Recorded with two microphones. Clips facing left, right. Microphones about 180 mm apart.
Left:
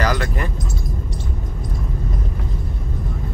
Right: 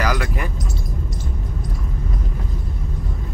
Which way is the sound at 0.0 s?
5° right (ahead or behind).